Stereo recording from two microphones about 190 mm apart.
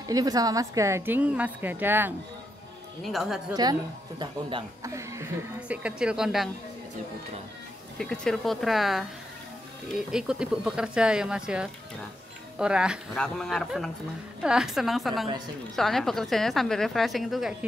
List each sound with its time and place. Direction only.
0.1 s a woman's voice: 20° right (ahead or behind); by 3.5 s centre (ahead or behind)
4.2 s speech: 25° right (ahead or behind)
4.9 s a woman's voice: 15° right (ahead or behind)
8.0 s a woman's voice: 5° left (ahead or behind)